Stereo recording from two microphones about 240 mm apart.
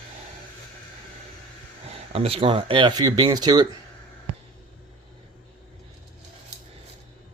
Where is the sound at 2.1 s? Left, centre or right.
Right.